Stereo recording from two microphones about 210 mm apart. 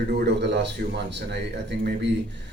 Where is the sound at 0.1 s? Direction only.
55° right (ahead or behind).